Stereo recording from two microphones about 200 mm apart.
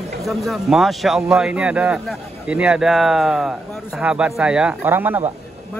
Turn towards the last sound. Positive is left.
turn(degrees=-10)  # may be behind; listen again after turning